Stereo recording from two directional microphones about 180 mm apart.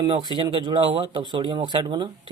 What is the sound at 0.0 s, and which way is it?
Speech, 25° right (ahead or behind).